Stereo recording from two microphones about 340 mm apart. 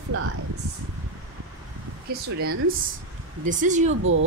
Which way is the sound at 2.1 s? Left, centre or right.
Right.